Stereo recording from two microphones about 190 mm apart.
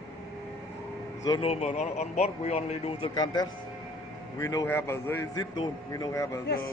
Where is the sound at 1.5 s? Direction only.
35° left (ahead or behind).